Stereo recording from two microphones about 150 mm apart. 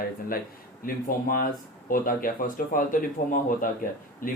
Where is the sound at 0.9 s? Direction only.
70° left (ahead or behind).